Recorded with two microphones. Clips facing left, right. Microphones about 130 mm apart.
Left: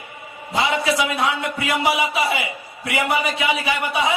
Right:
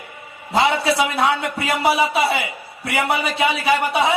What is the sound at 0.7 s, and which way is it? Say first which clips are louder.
A man's voice: right 1 dB; 35° right (ahead or behind).